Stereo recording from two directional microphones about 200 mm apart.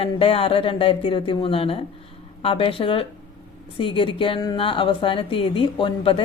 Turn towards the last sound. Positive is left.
turn(degrees=25)  # may be behind; listen again after turning